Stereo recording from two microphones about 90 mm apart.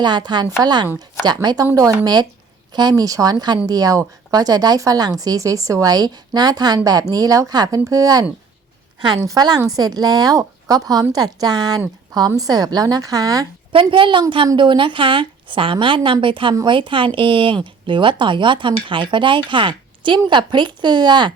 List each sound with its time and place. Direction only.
0.0 s speech: 55° right (ahead or behind)
2.9 s speech: 40° right (ahead or behind)
13.7 s a woman's voice: 70° right (ahead or behind); by 21.3 s 55° right (ahead or behind)